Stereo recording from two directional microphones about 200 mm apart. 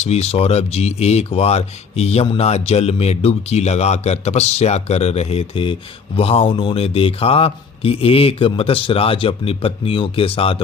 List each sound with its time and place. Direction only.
0.0 s a man's voice: 30° left (ahead or behind)